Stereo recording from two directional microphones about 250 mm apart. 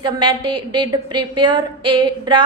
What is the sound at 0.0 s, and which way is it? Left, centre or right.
A woman's voice, centre.